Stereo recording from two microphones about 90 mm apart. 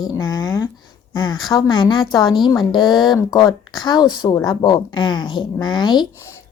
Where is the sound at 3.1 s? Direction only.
35° left (ahead or behind).